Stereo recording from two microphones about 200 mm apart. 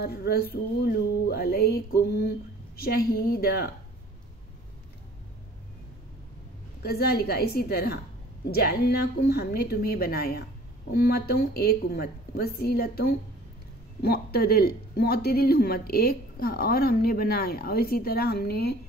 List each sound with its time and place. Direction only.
0.0 s speech: 50° left (ahead or behind)
6.8 s speech: 50° left (ahead or behind)